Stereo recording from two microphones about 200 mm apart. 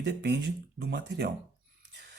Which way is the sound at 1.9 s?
55° right (ahead or behind).